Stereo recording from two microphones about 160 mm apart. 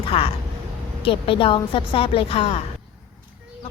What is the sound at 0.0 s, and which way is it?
Speech, 35° left (ahead or behind).